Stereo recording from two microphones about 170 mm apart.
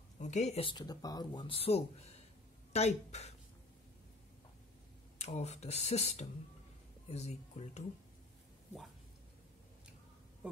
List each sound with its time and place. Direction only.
0.2 s speech: 40° left (ahead or behind)
5.2 s speech: 40° left (ahead or behind)